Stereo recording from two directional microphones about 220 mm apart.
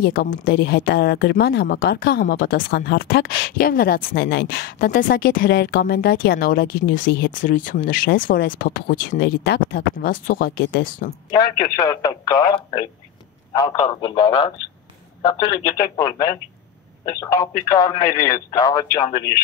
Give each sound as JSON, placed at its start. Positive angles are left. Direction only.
{"t": 0.0, "sound": "speech", "side_deg": 40}
{"t": 11.2, "sound": "speech", "side_deg": 20}